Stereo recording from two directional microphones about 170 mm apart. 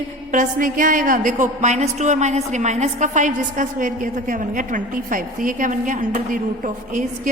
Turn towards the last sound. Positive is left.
turn(degrees=-50)  # may be behind; listen again after turning